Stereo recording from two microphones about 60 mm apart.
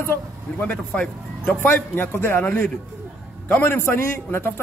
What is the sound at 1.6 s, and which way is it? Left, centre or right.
A man's voice, left.